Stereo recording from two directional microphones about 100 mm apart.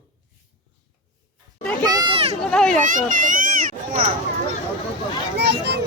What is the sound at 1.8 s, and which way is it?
Speech, 40° right (ahead or behind).